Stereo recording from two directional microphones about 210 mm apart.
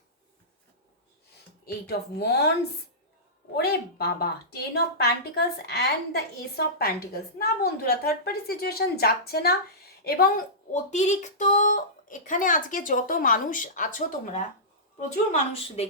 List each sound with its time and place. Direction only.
1.6 s a woman's voice: 50° left (ahead or behind)
3.5 s a woman's voice: 50° left (ahead or behind); by 15.9 s 30° left (ahead or behind)